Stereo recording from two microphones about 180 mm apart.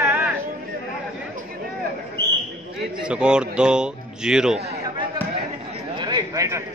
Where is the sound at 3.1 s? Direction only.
5° right (ahead or behind).